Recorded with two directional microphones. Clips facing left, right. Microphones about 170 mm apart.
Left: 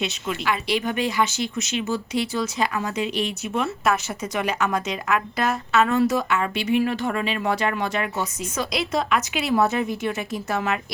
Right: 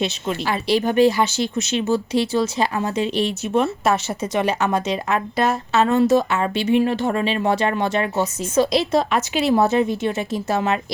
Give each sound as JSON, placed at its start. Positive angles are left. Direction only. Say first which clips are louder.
{"t": 0.0, "sound": "speech", "louder": "right 3 dB", "side_deg": -30}